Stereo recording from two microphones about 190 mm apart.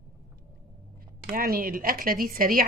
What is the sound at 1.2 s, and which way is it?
Speech, 50° right (ahead or behind).